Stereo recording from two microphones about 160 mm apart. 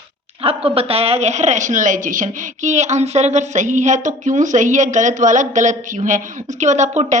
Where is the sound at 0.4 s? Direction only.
35° right (ahead or behind).